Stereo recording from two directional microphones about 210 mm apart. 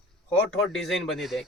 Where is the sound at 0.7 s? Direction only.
Centre (ahead or behind).